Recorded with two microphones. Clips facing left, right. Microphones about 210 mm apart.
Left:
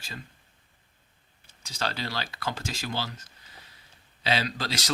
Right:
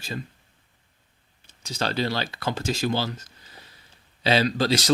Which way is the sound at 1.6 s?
25° right (ahead or behind).